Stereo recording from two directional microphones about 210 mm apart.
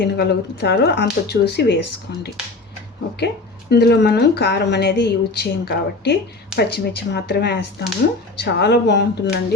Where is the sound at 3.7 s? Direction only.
50° left (ahead or behind).